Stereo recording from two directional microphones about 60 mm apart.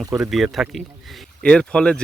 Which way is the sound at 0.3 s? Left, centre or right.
Centre.